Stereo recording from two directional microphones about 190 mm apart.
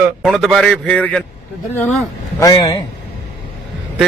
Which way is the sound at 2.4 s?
20° left (ahead or behind).